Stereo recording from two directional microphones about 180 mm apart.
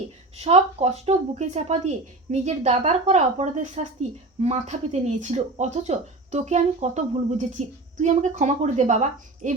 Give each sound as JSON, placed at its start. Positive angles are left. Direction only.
{"t": 0.3, "sound": "speech", "side_deg": -35}